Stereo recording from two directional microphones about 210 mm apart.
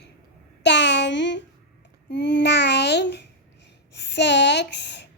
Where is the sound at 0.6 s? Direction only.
55° left (ahead or behind).